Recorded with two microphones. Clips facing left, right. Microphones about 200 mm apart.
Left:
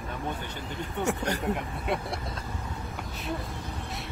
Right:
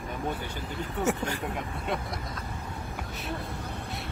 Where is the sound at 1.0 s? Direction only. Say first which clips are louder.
Even; 5° right (ahead or behind).